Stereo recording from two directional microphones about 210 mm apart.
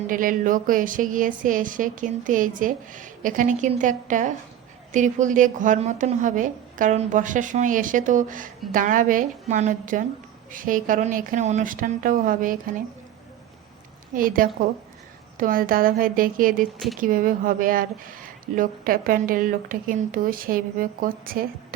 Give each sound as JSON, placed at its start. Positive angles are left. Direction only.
{"t": 0.1, "sound": "speech", "side_deg": -40}
{"t": 14.1, "sound": "speech", "side_deg": -40}